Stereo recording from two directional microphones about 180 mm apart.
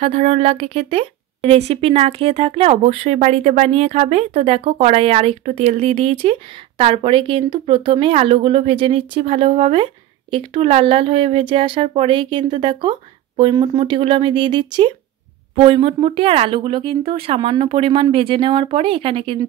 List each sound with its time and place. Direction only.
0.0 s a woman's voice: 35° right (ahead or behind)